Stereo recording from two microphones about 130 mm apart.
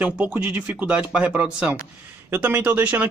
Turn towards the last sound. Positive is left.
turn(degrees=-15)  # may be behind; listen again after turning